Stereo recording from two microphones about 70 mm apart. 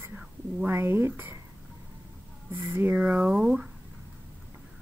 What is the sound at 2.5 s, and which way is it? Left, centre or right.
Speech, right.